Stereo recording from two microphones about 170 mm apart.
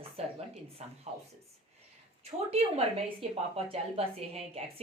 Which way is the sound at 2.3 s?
35° right (ahead or behind).